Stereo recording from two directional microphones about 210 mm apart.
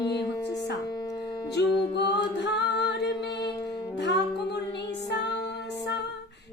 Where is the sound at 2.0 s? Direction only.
55° left (ahead or behind).